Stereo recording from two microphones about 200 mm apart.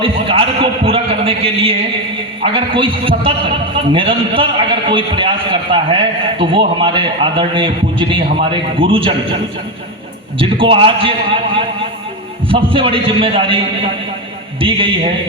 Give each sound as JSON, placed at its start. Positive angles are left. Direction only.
{"t": 0.0, "sound": "a sound", "side_deg": -25}
{"t": 2.4, "sound": "a man's voice", "side_deg": -25}
{"t": 14.6, "sound": "a man's voice", "side_deg": -25}